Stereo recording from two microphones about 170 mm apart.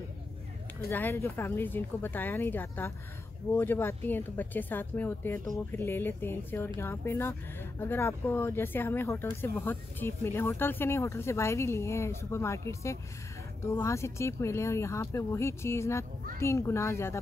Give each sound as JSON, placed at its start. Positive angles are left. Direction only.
{"t": 0.8, "sound": "speech", "side_deg": 15}